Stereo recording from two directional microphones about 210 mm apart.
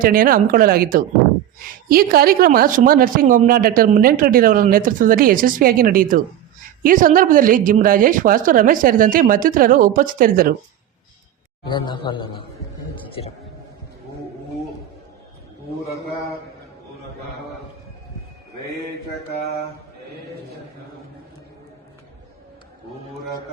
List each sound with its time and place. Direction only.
0.0 s a woman's voice: 45° right (ahead or behind)
11.6 s a man's voice: 20° left (ahead or behind)